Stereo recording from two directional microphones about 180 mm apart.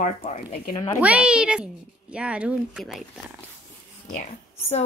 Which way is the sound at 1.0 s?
5° right (ahead or behind).